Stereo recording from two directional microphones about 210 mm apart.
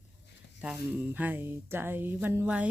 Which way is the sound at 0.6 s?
5° right (ahead or behind).